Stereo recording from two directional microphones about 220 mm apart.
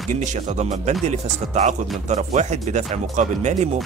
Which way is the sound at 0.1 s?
35° right (ahead or behind).